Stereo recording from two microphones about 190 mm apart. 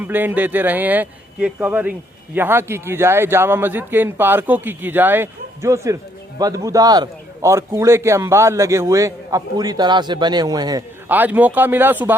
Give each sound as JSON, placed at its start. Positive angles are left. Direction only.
{"t": 0.0, "sound": "speech", "side_deg": -10}
{"t": 11.1, "sound": "speech", "side_deg": -10}